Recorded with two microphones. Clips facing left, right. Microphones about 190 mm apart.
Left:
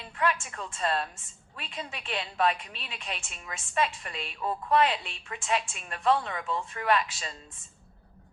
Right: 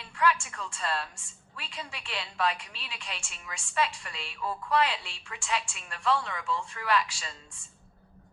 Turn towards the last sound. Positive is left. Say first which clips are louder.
# left 2 dB
turn(degrees=20)  # may be behind; listen again after turning